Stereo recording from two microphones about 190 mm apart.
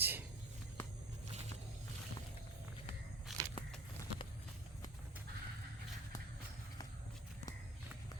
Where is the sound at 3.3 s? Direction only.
Centre (ahead or behind).